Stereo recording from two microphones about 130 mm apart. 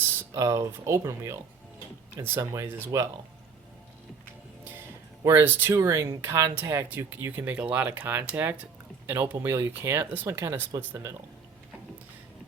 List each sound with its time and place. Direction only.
0.2 s speech: 25° right (ahead or behind)
4.7 s music: 20° right (ahead or behind)
5.7 s speech: 20° right (ahead or behind)